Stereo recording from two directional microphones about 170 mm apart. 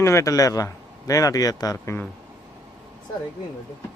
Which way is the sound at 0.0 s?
15° left (ahead or behind).